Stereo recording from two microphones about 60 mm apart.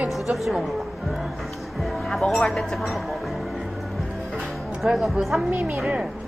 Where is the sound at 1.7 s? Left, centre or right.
Centre.